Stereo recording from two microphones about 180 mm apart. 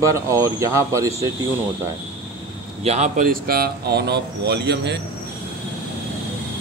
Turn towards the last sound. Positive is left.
turn(degrees=-70)  # may be behind; listen again after turning